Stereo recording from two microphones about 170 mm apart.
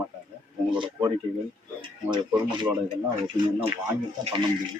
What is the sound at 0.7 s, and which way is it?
Speech, 30° right (ahead or behind).